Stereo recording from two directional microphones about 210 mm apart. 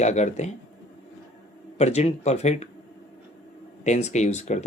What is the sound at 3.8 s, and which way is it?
Speech, 35° left (ahead or behind).